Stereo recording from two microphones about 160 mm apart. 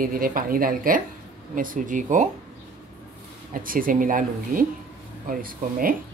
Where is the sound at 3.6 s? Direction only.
60° right (ahead or behind).